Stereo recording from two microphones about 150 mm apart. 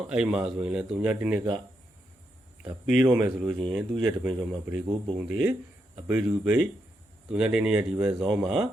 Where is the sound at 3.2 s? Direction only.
30° right (ahead or behind).